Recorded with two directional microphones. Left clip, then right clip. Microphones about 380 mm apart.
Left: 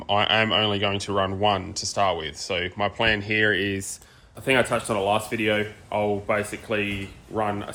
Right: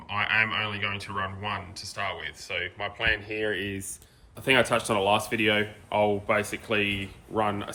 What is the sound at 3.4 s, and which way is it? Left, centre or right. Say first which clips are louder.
Speech: left 7 dB; left.